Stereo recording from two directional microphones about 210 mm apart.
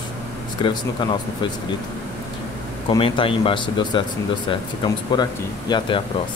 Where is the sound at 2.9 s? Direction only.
25° left (ahead or behind).